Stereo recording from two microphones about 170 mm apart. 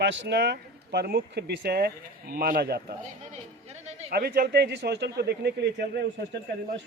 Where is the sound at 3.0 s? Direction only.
40° right (ahead or behind).